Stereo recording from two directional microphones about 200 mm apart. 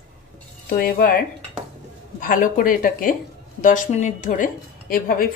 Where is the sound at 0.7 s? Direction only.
45° left (ahead or behind).